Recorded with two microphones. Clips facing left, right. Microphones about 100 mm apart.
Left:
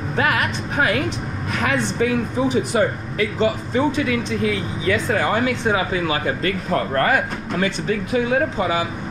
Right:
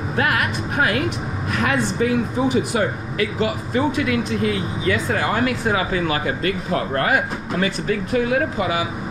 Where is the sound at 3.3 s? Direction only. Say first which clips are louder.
Left 3 dB; 5° right (ahead or behind).